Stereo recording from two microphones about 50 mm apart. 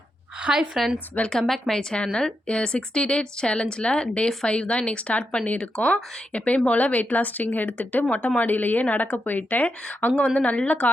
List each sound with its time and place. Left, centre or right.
0.4 s a woman's voice: centre
1.3 s a woman's voice: centre; by 10.8 s left